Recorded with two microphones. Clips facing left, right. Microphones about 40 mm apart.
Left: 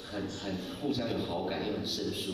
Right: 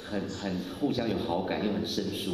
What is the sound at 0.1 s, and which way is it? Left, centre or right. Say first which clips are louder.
A man's voice: right 4 dB; right.